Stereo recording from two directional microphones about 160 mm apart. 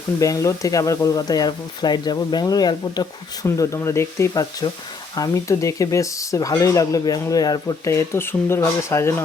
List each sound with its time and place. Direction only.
0.2 s speech: 20° left (ahead or behind)